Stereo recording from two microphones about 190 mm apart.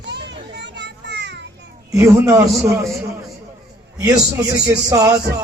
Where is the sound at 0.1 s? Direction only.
65° right (ahead or behind).